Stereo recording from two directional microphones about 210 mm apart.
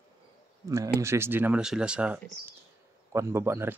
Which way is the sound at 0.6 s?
15° right (ahead or behind).